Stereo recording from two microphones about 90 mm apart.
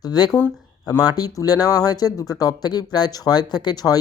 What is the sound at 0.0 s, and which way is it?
Speech, 50° left (ahead or behind).